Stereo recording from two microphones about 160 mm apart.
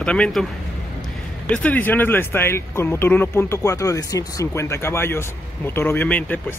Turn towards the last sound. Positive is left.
turn(degrees=10)  # may be behind; listen again after turning